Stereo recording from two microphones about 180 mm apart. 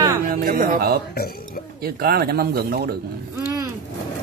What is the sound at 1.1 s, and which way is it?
Speech, 60° left (ahead or behind).